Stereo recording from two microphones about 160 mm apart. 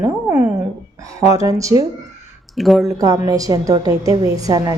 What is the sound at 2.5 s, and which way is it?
Speech, centre (ahead or behind).